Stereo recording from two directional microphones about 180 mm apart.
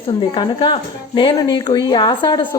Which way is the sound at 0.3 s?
25° left (ahead or behind).